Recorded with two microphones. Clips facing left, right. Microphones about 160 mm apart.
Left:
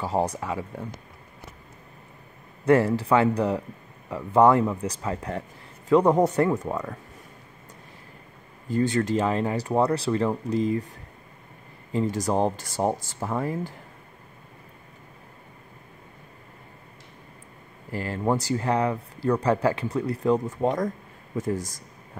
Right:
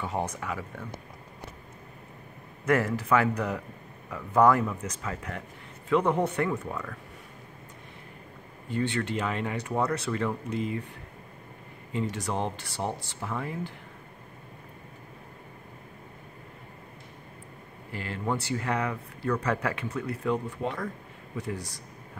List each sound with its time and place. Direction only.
0.0 s speech: 35° left (ahead or behind)
2.6 s speech: 30° left (ahead or behind)
8.6 s speech: 40° left (ahead or behind)
11.9 s speech: 40° left (ahead or behind)
17.9 s speech: 40° left (ahead or behind)